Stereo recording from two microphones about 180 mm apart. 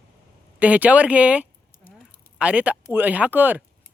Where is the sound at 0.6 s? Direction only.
10° right (ahead or behind).